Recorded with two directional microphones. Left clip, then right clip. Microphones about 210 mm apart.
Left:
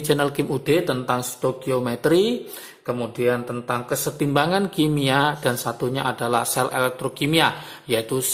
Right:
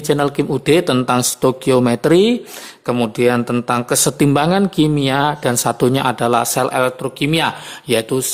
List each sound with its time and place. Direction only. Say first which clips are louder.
0.1 s speech: right 5 dB; 20° right (ahead or behind)